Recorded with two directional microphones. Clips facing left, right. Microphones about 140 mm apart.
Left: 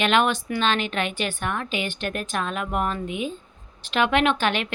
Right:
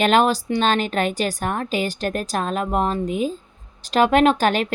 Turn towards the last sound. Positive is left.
turn(degrees=-40)  # may be behind; listen again after turning